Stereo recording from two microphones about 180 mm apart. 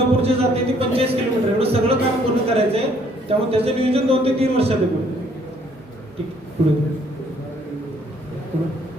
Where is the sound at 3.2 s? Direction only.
35° right (ahead or behind).